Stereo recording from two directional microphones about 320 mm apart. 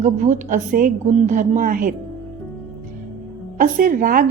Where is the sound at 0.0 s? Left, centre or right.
Right.